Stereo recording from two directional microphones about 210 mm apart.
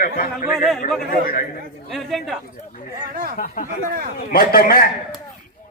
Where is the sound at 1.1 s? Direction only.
45° left (ahead or behind).